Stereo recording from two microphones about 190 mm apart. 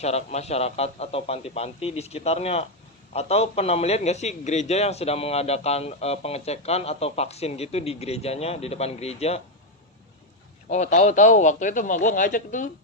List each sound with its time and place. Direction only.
0.0 s a man's voice: 35° left (ahead or behind)
10.7 s a man's voice: 35° left (ahead or behind)